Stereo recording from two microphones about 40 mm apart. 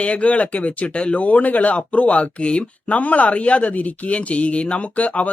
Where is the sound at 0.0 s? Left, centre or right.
Left.